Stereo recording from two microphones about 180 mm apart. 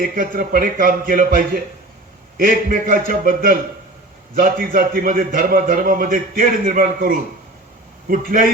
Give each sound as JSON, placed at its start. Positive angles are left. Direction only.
{"t": 0.0, "sound": "a man's voice", "side_deg": -50}